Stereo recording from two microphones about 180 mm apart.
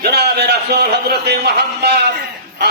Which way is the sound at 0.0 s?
65° right (ahead or behind).